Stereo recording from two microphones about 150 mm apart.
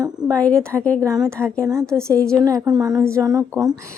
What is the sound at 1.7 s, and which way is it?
A woman's voice, 20° right (ahead or behind).